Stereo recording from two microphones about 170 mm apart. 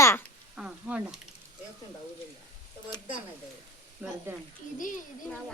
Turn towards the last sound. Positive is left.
turn(degrees=-10)  # may be behind; listen again after turning